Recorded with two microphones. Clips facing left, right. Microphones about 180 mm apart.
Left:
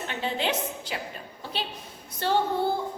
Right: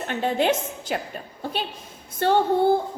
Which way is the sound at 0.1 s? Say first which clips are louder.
Right 7 dB; 50° right (ahead or behind).